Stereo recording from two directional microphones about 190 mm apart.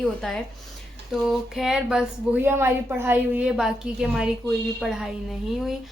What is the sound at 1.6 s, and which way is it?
A woman's voice, 5° right (ahead or behind).